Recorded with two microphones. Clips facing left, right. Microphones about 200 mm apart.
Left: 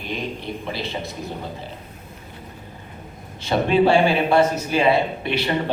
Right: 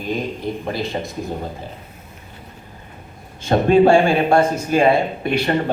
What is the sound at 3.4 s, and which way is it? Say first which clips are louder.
A man's voice: right 5 dB; 45° right (ahead or behind).